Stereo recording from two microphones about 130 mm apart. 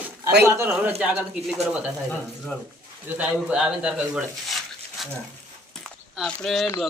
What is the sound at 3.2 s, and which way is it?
Speech, 5° right (ahead or behind).